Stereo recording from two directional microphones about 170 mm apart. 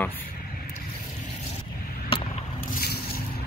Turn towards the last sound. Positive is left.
turn(degrees=60)  # may be behind; listen again after turning